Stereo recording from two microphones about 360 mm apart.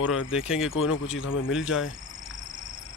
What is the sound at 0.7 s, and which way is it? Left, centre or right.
Speech, left.